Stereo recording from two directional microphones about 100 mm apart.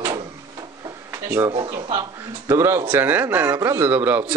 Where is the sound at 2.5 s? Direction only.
25° right (ahead or behind).